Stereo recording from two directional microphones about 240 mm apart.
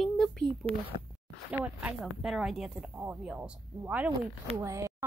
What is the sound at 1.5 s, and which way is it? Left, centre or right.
Speech, centre.